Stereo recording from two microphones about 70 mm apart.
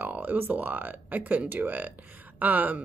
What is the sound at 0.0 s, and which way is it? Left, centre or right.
Speech, right.